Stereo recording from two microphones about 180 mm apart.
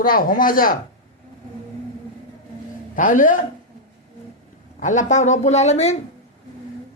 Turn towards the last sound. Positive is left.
turn(degrees=40)  # may be behind; listen again after turning